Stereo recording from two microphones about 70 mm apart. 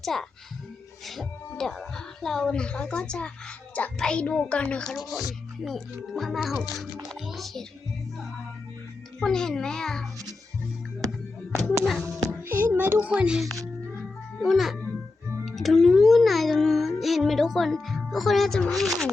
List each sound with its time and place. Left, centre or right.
0.0 s a child's voice: centre
5.6 s a child's voice: centre
9.2 s speech: centre
11.5 s speech: centre
12.5 s a sound: right
13.1 s speech: centre
14.4 s a child's voice: centre